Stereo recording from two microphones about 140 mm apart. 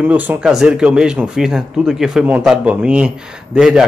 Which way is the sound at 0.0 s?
10° right (ahead or behind).